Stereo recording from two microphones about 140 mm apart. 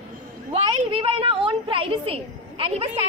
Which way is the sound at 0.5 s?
40° right (ahead or behind).